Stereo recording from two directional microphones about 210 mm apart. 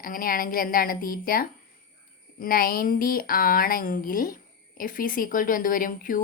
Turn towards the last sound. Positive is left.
turn(degrees=40)  # may be behind; listen again after turning